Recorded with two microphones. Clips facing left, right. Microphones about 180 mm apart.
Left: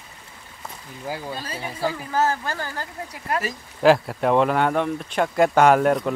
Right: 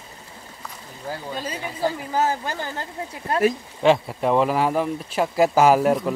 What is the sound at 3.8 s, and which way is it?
Speech, centre (ahead or behind).